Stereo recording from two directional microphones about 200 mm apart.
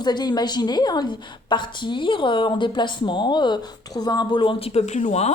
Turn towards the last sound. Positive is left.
turn(degrees=35)  # may be behind; listen again after turning